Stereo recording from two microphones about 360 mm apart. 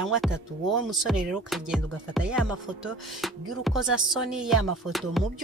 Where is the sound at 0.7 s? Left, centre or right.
Centre.